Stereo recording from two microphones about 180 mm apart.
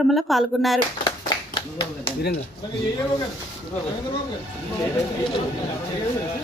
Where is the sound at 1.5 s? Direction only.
25° left (ahead or behind).